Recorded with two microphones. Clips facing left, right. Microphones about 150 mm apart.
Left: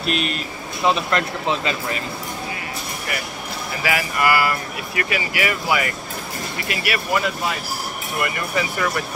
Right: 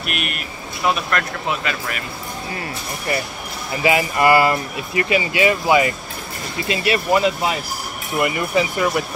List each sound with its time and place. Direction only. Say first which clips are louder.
0.0 s speech: left 4 dB; 30° left (ahead or behind)
3.8 s speech: right 5 dB; 25° right (ahead or behind)